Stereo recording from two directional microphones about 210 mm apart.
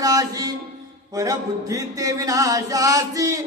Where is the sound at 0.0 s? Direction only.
15° right (ahead or behind).